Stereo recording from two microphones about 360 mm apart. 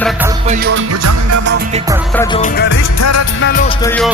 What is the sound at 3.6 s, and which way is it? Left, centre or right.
Music, centre.